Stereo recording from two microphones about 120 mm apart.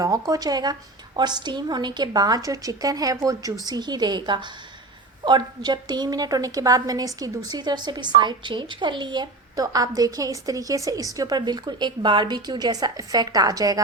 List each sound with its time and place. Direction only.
0.3 s a woman's voice: 30° right (ahead or behind)